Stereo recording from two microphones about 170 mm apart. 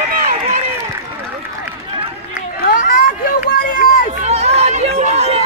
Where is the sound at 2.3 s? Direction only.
60° left (ahead or behind).